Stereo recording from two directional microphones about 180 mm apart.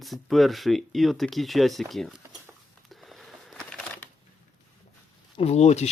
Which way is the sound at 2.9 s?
Centre (ahead or behind).